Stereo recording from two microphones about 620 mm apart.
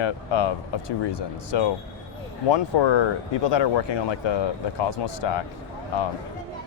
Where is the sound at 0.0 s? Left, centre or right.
Left.